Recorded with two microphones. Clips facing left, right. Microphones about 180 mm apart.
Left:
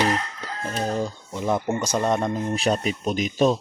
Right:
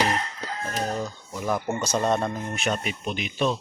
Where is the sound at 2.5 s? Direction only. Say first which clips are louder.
Left 5 dB; 35° left (ahead or behind).